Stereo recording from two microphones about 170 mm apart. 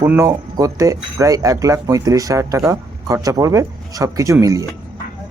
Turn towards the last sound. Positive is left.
turn(degrees=-20)  # may be behind; listen again after turning